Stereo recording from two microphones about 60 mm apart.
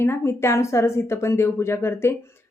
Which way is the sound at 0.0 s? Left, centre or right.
Left.